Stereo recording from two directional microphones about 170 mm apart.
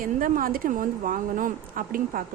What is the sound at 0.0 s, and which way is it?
A woman's voice, 55° right (ahead or behind).